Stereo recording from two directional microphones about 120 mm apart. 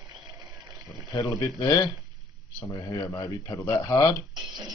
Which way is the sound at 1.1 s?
30° left (ahead or behind).